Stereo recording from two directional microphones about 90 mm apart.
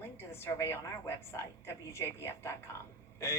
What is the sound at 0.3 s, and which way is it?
Speech, 25° left (ahead or behind).